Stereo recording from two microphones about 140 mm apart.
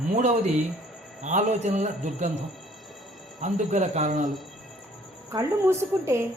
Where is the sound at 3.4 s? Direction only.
60° right (ahead or behind).